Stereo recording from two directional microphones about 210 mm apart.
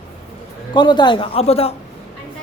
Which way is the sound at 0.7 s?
20° left (ahead or behind).